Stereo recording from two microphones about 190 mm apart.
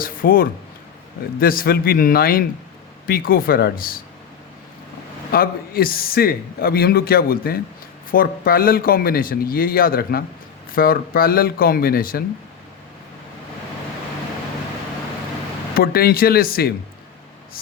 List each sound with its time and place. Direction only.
0.0 s a sound: 50° left (ahead or behind)
1.4 s a man's voice: 50° left (ahead or behind)
5.3 s a man's voice: 50° left (ahead or behind)
15.7 s a man's voice: 50° left (ahead or behind)